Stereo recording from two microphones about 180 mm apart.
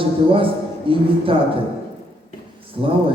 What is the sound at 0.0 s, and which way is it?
A man's voice, 30° right (ahead or behind).